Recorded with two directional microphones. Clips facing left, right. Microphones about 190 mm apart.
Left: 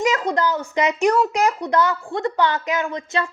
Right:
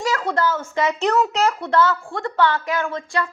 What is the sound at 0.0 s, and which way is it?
A woman's voice, 20° left (ahead or behind).